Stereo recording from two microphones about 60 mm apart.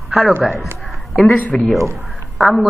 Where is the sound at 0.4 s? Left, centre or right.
Centre.